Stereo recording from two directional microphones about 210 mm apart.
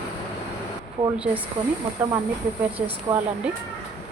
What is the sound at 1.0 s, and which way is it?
Speech, 30° right (ahead or behind).